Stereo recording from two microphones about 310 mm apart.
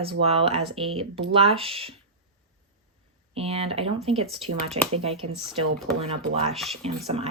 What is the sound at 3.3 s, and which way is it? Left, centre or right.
Speech, centre.